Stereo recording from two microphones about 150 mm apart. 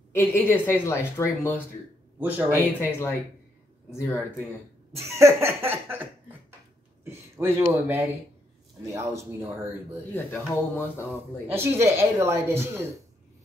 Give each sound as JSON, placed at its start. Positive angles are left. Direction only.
{"t": 0.1, "sound": "a woman's voice", "side_deg": 15}
{"t": 2.1, "sound": "speech", "side_deg": -15}
{"t": 2.8, "sound": "a woman's voice", "side_deg": 15}
{"t": 4.9, "sound": "speech", "side_deg": -20}
{"t": 7.1, "sound": "a sound", "side_deg": -15}
{"t": 7.7, "sound": "a man's voice", "side_deg": -15}
{"t": 10.1, "sound": "a woman's voice", "side_deg": 15}
{"t": 11.5, "sound": "speech", "side_deg": -15}